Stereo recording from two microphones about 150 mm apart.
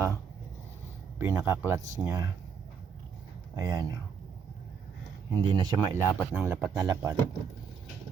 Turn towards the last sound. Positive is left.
turn(degrees=-20)  # may be behind; listen again after turning